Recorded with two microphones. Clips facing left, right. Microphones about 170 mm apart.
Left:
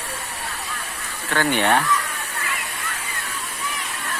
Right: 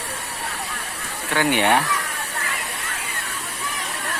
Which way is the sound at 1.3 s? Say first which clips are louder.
Right 1 dB; 15° right (ahead or behind).